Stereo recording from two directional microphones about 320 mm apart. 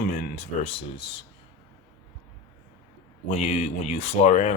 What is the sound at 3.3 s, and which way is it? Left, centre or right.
Speech, left.